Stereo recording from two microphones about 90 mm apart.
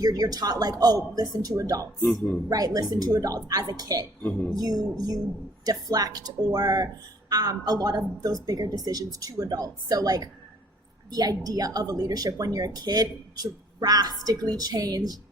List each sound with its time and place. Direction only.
0.0 s a woman's voice: 45° right (ahead or behind)
4.2 s speech: 15° left (ahead or behind)
4.5 s a woman's voice: 45° right (ahead or behind)